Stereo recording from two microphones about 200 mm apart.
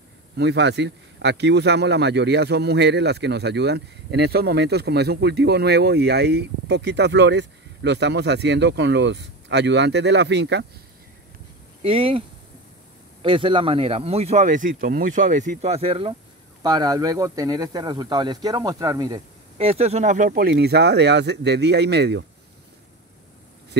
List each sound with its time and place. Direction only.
0.4 s speech: 60° right (ahead or behind)
11.8 s speech: 25° right (ahead or behind)
13.2 s speech: 25° right (ahead or behind)
19.6 s speech: 30° right (ahead or behind); by 22.2 s 55° right (ahead or behind)